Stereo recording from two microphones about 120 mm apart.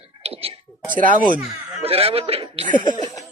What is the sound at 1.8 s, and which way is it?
Speech, 55° right (ahead or behind).